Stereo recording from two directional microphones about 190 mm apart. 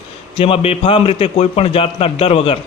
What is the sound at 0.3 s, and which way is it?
A man's voice, 30° left (ahead or behind).